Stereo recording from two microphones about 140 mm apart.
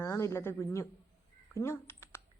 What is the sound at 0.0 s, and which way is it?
A woman's voice, 20° left (ahead or behind).